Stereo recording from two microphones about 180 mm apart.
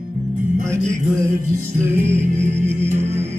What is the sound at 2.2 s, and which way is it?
Music, 45° right (ahead or behind).